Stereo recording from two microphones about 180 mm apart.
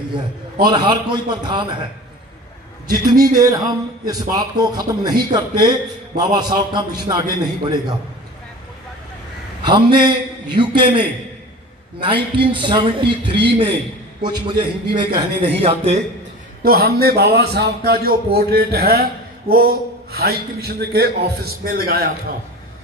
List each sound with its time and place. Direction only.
0.6 s a man's voice: 25° right (ahead or behind)
2.8 s a man's voice: 20° right (ahead or behind)
9.6 s a man's voice: 25° right (ahead or behind)
12.5 s a man's voice: 25° right (ahead or behind)
16.6 s a man's voice: 60° right (ahead or behind)